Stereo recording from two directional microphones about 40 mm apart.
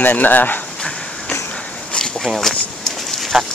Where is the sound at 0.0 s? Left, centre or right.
Left.